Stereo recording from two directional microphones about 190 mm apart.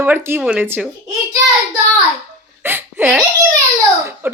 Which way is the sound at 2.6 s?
10° right (ahead or behind).